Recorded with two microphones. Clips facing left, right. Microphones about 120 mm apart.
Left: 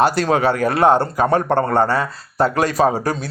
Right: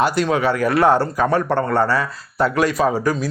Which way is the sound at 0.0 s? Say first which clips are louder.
Left 2 dB; 35° left (ahead or behind).